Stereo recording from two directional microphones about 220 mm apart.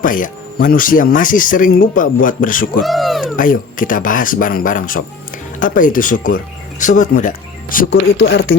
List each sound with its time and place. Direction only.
0.0 s speech: 40° left (ahead or behind)
2.8 s speech: centre (ahead or behind)
3.3 s speech: 40° left (ahead or behind)